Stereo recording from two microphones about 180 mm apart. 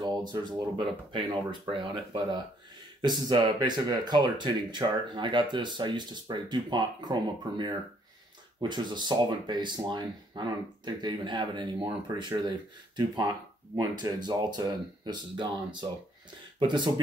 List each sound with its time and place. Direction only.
0.0 s speech: 25° right (ahead or behind)